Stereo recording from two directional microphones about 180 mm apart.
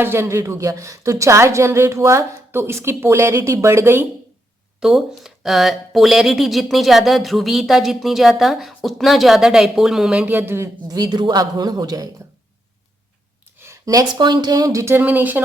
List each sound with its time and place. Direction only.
0.0 s speech: 15° right (ahead or behind)
4.8 s speech: centre (ahead or behind); by 12.0 s 20° right (ahead or behind)
13.6 s speech: 15° right (ahead or behind)